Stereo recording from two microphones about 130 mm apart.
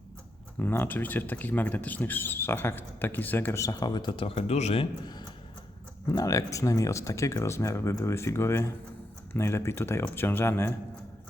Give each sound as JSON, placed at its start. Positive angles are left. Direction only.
{"t": 0.6, "sound": "speech", "side_deg": 15}
{"t": 6.1, "sound": "speech", "side_deg": 25}